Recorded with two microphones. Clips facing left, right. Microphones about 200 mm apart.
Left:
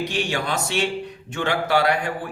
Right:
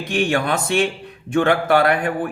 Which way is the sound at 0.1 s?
55° right (ahead or behind).